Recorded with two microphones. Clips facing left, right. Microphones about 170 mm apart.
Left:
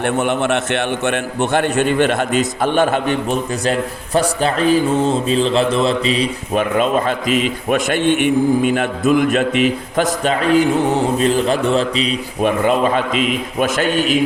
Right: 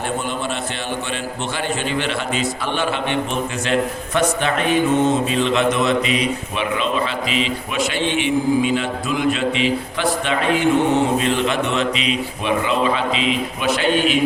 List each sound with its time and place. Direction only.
0.0 s a man's voice: 70° left (ahead or behind); by 3.2 s 45° left (ahead or behind)
3.7 s speech: 35° left (ahead or behind)
6.6 s a man's voice: 45° left (ahead or behind)